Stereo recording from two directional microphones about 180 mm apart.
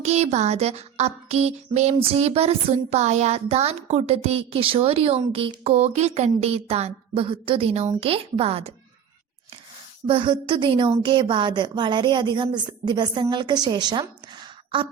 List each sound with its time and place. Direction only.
0.0 s music: 35° right (ahead or behind)
10.1 s a woman's voice: 30° right (ahead or behind)